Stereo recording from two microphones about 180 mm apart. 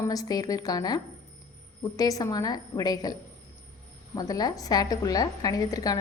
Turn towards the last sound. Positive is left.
turn(degrees=20)  # may be behind; listen again after turning